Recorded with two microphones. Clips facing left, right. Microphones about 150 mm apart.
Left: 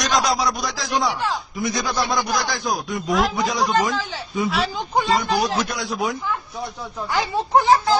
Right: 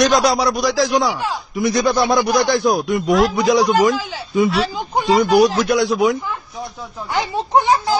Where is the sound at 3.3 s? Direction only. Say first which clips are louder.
Right 6 dB; 75° right (ahead or behind).